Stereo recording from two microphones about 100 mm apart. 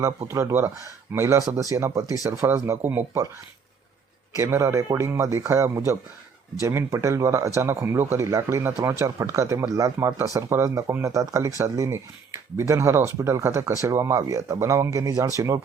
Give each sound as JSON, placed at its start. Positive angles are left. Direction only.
{"t": 0.3, "sound": "speech", "side_deg": -25}
{"t": 4.4, "sound": "speech", "side_deg": -30}